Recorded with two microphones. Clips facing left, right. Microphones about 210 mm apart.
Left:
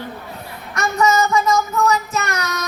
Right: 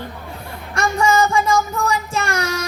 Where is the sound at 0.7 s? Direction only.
30° right (ahead or behind).